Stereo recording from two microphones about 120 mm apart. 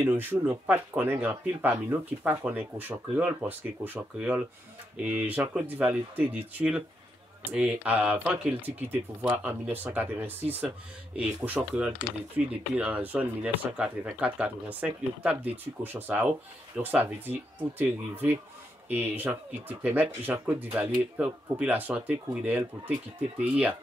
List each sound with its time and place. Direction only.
0.0 s speech: 15° right (ahead or behind)